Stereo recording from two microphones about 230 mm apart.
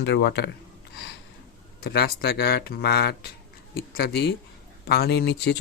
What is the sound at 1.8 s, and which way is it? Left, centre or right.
Speech, left.